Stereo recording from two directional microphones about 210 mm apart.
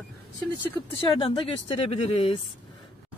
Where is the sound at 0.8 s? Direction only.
25° left (ahead or behind).